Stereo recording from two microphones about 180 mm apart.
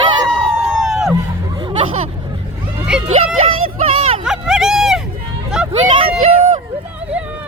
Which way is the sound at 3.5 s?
30° right (ahead or behind).